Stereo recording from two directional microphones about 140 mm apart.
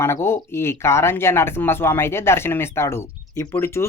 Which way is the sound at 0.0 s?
15° left (ahead or behind).